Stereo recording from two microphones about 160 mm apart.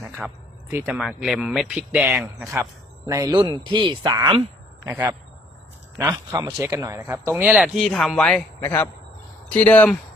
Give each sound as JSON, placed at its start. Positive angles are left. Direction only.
{"t": 0.0, "sound": "a sound", "side_deg": -5}
{"t": 0.9, "sound": "speech", "side_deg": 0}
{"t": 3.1, "sound": "speech", "side_deg": -25}
{"t": 4.9, "sound": "speech", "side_deg": -10}
{"t": 6.3, "sound": "speech", "side_deg": -20}